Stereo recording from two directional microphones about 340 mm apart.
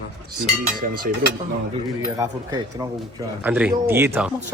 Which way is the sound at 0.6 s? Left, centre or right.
Right.